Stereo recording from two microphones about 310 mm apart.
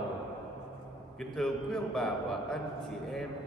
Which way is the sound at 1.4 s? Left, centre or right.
Centre.